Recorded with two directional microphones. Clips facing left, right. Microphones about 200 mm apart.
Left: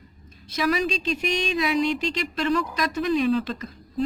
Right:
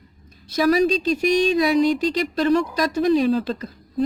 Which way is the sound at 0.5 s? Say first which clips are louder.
Right 7 dB; 35° right (ahead or behind).